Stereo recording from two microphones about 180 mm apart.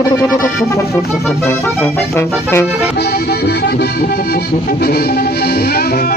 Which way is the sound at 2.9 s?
60° left (ahead or behind).